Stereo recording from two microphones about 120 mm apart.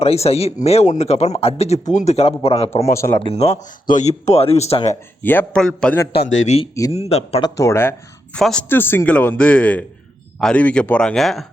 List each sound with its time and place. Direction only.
0.0 s speech: 60° left (ahead or behind)
2.8 s speech: 25° left (ahead or behind)
3.2 s speech: 55° left (ahead or behind)
5.2 s speech: 15° left (ahead or behind)
6.2 s speech: 85° left
6.9 s speech: 60° left (ahead or behind)
7.4 s speech: 25° left (ahead or behind)
8.4 s speech: 5° left (ahead or behind)
8.7 s speech: 15° left (ahead or behind); by 11.4 s centre (ahead or behind)